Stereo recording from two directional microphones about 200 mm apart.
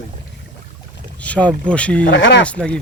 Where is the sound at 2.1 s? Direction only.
65° left (ahead or behind).